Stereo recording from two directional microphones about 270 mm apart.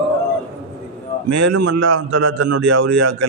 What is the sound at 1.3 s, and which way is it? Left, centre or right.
A man's voice, right.